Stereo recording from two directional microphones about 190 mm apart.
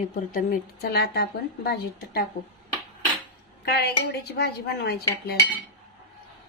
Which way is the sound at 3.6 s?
55° left (ahead or behind).